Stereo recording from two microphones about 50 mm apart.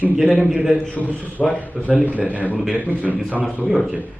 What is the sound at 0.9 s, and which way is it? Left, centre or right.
Speech, left.